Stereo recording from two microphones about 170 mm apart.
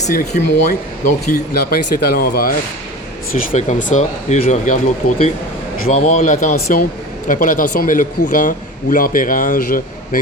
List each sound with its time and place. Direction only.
0.0 s a man's voice: 45° left (ahead or behind)
1.3 s speech: 65° left (ahead or behind)
3.5 s a man's voice: 45° left (ahead or behind)
5.0 s speech: 65° left (ahead or behind)
5.8 s a man's voice: 45° left (ahead or behind)